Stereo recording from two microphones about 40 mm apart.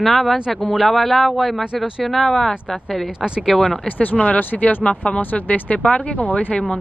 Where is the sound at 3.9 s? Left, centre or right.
Left.